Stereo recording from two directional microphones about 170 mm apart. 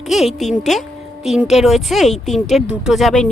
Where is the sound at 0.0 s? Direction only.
Centre (ahead or behind).